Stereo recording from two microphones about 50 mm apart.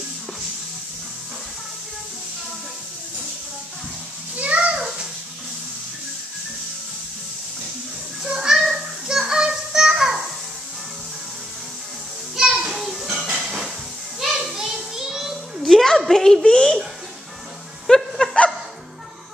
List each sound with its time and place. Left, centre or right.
4.4 s a sound: right
8.3 s music: centre
12.4 s children playing: centre
12.7 s music: centre
13.4 s hiss: centre
14.2 s child singing: centre
15.6 s a sound: centre
17.8 s laughter: centre